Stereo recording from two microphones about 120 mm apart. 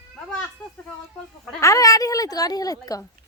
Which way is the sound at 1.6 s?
25° left (ahead or behind).